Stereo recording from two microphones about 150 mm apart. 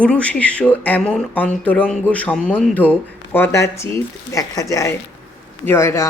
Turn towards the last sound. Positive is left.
turn(degrees=20)  # may be behind; listen again after turning